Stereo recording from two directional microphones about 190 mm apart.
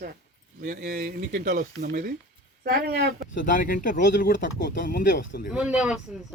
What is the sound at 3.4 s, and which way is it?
Speech, 45° left (ahead or behind).